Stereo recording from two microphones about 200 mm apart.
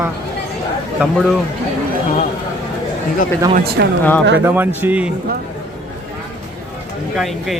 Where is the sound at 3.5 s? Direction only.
55° right (ahead or behind).